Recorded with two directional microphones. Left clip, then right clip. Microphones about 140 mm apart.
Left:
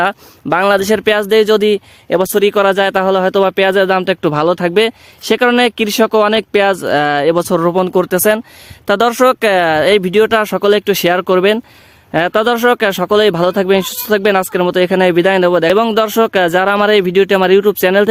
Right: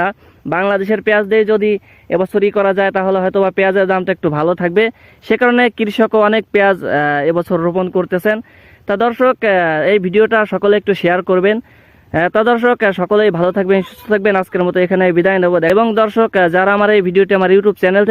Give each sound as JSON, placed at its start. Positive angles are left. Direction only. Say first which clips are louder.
{"t": 0.0, "sound": "speech", "louder": "left 3 dB", "side_deg": 35}